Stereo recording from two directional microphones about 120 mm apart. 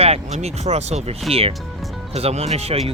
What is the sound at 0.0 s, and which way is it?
Speech, 60° right (ahead or behind).